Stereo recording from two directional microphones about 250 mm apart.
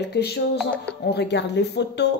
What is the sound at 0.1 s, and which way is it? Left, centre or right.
Speech, left.